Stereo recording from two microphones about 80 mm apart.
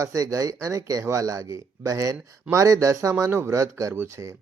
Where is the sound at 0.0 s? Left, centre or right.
Right.